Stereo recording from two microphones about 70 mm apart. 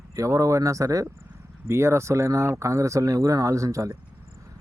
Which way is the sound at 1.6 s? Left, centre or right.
Right.